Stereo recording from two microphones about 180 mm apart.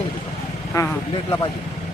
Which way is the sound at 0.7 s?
15° left (ahead or behind).